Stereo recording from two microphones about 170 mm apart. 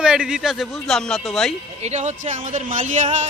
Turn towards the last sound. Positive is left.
turn(degrees=-45)  # may be behind; listen again after turning